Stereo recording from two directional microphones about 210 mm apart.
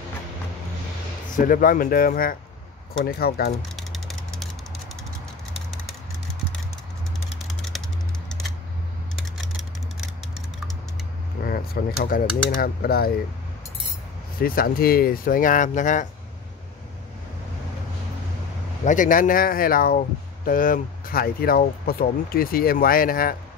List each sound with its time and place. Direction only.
1.3 s speech: 40° left (ahead or behind)
3.5 s music: centre (ahead or behind)
9.1 s typing: centre (ahead or behind)
11.4 s a sound: 45° left (ahead or behind)
12.4 s speech: 45° left (ahead or behind)
14.4 s speech: 45° left (ahead or behind)
18.9 s speech: 40° left (ahead or behind)